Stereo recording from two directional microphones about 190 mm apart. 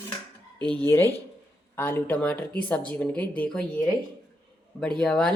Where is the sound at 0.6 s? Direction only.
25° right (ahead or behind).